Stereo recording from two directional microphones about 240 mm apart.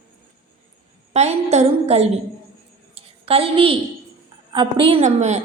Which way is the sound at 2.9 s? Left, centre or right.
Right.